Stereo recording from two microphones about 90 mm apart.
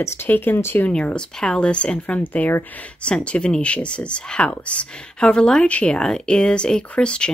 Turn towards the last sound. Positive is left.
turn(degrees=10)  # may be behind; listen again after turning